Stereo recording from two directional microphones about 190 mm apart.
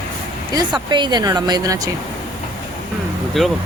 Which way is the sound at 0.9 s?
25° right (ahead or behind).